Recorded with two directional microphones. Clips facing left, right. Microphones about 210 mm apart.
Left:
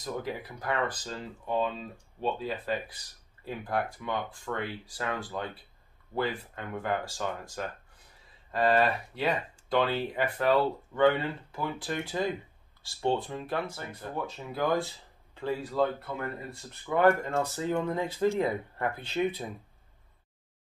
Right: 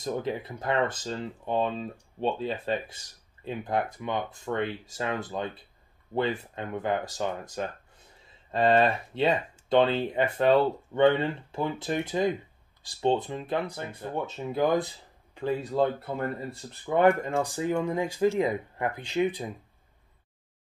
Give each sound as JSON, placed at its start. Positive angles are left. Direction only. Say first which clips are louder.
{"t": 0.0, "sound": "speech", "louder": "right 4 dB", "side_deg": -25}
{"t": 16.9, "sound": "speech", "louder": "right 2 dB", "side_deg": -20}